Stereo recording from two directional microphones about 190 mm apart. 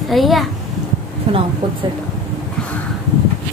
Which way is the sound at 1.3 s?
30° right (ahead or behind).